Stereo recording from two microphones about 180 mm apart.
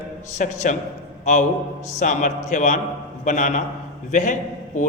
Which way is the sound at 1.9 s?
40° left (ahead or behind).